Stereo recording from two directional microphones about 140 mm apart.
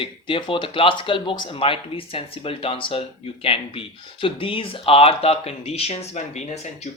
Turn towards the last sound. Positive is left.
turn(degrees=55)  # may be behind; listen again after turning